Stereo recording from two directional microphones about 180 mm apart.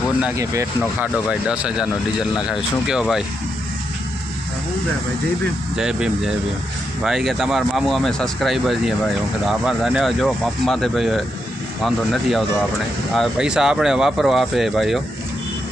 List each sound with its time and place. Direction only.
0.2 s speech: 15° right (ahead or behind)
1.0 s speech: 5° right (ahead or behind)
5.7 s speech: 5° right (ahead or behind)